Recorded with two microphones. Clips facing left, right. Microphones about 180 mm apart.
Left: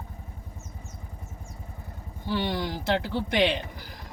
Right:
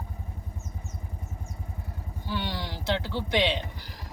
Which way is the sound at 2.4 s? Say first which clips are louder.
Left 4 dB; 55° left (ahead or behind).